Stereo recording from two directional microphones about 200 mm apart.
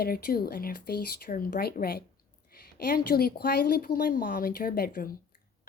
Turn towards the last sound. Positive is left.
turn(degrees=45)  # may be behind; listen again after turning